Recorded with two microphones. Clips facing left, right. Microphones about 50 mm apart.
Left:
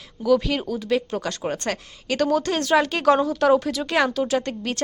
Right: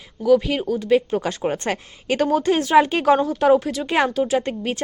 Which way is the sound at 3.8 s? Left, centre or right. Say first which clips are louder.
Right 1 dB; right.